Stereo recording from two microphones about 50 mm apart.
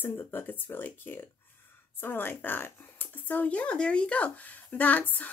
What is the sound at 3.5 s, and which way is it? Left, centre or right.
Speech, left.